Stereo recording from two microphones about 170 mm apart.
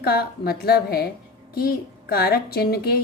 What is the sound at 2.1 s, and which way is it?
Speech, 65° left (ahead or behind).